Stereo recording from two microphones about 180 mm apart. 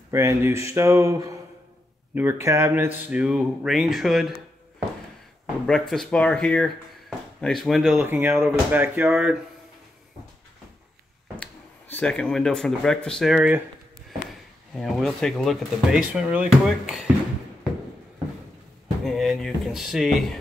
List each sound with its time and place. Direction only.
0.1 s speech: 15° right (ahead or behind)
5.7 s speech: centre (ahead or behind)
11.9 s speech: 5° left (ahead or behind)
14.8 s speech: centre (ahead or behind)
19.0 s speech: centre (ahead or behind)